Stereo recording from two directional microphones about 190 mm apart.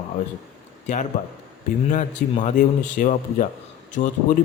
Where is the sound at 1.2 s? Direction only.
45° left (ahead or behind).